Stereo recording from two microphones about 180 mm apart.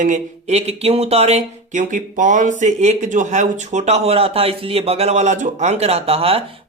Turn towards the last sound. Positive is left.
turn(degrees=-30)  # may be behind; listen again after turning